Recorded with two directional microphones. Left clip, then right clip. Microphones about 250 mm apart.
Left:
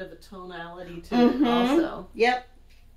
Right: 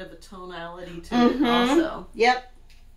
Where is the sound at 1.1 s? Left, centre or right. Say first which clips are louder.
Right 1 dB; centre.